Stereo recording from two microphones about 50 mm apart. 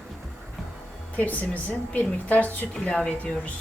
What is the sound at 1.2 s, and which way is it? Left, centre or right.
A woman's voice, left.